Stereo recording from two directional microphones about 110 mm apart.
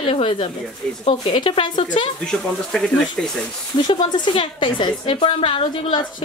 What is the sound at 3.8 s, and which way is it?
A woman's voice, 45° left (ahead or behind).